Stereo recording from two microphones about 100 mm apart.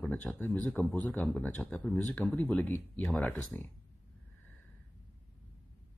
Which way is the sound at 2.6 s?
25° left (ahead or behind).